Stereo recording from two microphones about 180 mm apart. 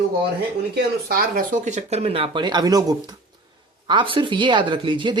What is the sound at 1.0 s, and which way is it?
Speech, 55° right (ahead or behind).